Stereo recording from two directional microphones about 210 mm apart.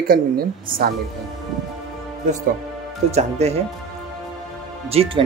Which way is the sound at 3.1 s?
30° right (ahead or behind).